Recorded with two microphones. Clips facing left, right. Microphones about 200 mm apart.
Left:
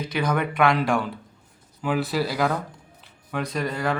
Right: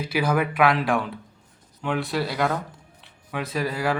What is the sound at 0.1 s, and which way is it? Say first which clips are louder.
Speech: right 2 dB; 5° right (ahead or behind).